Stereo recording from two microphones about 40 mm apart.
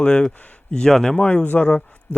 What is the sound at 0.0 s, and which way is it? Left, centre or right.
Speech, left.